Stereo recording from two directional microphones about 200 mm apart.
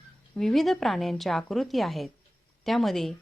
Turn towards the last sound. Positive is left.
turn(degrees=0)  # may be behind; listen again after turning